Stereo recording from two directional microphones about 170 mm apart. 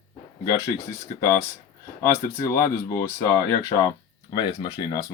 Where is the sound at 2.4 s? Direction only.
15° left (ahead or behind).